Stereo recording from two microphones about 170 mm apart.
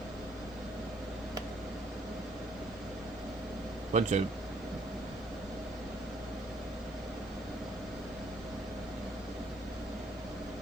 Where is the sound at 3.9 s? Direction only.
45° right (ahead or behind).